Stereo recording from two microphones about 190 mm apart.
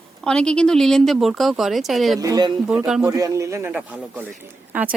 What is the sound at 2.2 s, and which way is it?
A man's voice, 20° right (ahead or behind).